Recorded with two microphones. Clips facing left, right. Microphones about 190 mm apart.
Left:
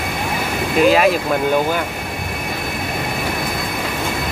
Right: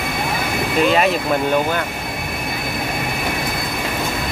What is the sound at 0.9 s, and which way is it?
Speech, centre (ahead or behind).